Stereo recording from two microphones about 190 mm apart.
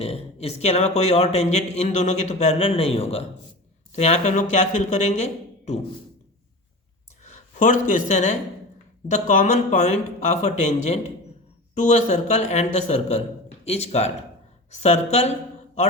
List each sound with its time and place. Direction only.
0.0 s a man's voice: 30° left (ahead or behind)
7.3 s a man's voice: 35° left (ahead or behind)